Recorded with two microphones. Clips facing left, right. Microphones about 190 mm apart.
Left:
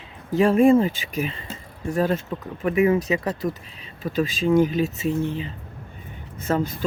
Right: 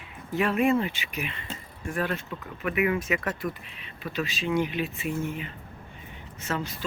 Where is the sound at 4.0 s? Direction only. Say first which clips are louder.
Left 8 dB; 45° left (ahead or behind).